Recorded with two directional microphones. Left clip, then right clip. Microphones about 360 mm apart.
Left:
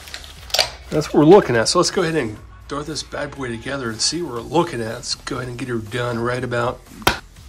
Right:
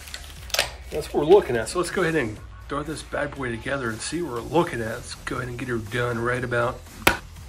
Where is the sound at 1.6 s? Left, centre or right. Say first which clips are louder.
Left 7 dB; centre.